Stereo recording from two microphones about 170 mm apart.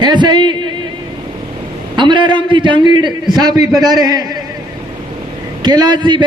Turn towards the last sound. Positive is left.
turn(degrees=-25)  # may be behind; listen again after turning